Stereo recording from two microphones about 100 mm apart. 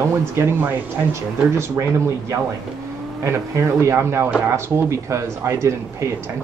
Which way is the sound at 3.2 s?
30° right (ahead or behind).